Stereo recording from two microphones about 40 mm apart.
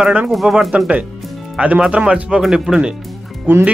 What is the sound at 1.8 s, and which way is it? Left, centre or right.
Speech, right.